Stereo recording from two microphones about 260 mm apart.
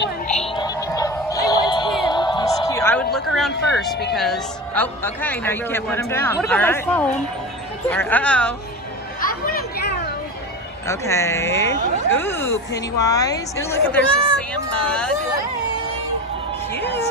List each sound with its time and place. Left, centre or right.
0.3 s music: left
2.0 s a sound: centre
4.1 s a man's voice: centre
9.3 s chatter: left
10.9 s a man's voice: centre
16.7 s speech: centre